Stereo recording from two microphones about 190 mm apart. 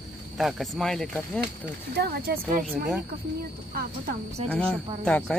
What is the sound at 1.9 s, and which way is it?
Speech, 55° right (ahead or behind).